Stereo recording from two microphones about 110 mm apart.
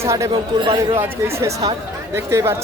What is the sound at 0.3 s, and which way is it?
Speech, 45° right (ahead or behind).